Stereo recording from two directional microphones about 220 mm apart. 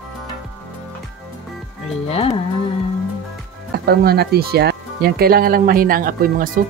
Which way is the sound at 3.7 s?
45° right (ahead or behind).